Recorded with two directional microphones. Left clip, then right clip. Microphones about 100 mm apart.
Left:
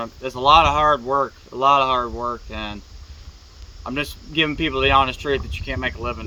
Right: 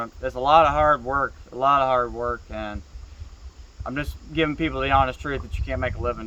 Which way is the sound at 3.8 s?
30° right (ahead or behind).